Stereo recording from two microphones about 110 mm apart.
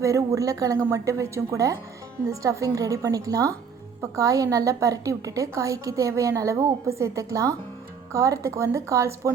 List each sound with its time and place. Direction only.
0.0 s a woman's voice: 30° right (ahead or behind)